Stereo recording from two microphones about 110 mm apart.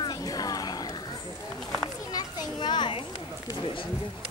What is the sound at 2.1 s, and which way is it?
Children playing, 35° left (ahead or behind).